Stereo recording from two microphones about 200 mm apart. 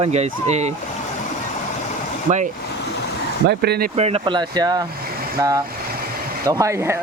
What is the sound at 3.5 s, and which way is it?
Speech, 50° right (ahead or behind).